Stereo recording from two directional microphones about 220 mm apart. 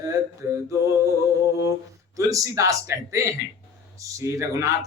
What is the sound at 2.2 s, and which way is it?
Speech, 15° right (ahead or behind).